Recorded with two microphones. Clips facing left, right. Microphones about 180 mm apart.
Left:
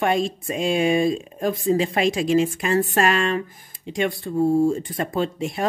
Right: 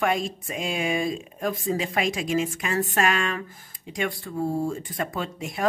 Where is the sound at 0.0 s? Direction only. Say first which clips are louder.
Left 4 dB; 30° left (ahead or behind).